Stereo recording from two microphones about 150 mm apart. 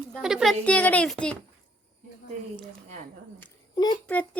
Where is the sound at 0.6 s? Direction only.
10° left (ahead or behind).